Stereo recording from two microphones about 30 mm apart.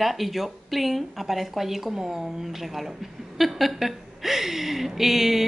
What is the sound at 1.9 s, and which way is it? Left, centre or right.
Speech, centre.